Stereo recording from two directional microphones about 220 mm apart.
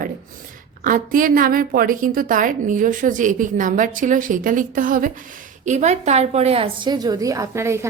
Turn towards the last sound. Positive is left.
turn(degrees=-10)  # may be behind; listen again after turning